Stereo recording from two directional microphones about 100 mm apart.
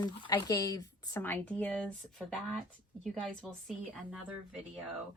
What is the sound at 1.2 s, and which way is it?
Speech, 15° left (ahead or behind).